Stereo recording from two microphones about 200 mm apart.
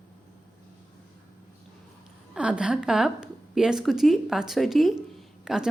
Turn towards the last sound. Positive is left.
turn(degrees=-5)  # may be behind; listen again after turning